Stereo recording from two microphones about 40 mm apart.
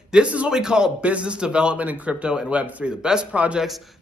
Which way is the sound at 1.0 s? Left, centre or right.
Right.